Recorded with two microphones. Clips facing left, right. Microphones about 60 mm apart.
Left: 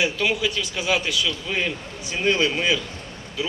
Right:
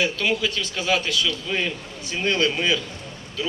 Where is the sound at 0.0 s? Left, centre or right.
Centre.